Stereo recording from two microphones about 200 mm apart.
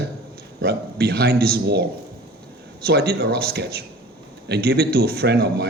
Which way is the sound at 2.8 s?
50° right (ahead or behind).